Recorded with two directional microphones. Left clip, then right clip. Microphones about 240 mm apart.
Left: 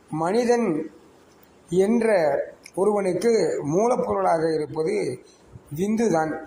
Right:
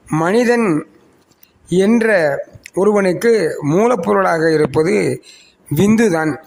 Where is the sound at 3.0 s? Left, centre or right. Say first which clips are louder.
Right 7 dB; right.